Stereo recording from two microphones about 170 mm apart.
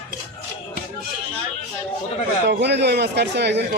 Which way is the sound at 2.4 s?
85° right.